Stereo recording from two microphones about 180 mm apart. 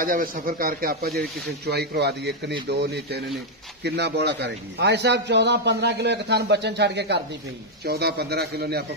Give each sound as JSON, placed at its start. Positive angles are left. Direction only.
{"t": 0.0, "sound": "a man's voice", "side_deg": -50}